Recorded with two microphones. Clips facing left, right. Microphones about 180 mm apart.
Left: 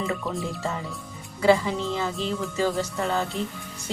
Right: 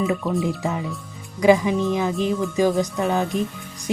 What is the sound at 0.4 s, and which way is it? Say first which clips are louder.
Speech: right 6 dB; 15° right (ahead or behind).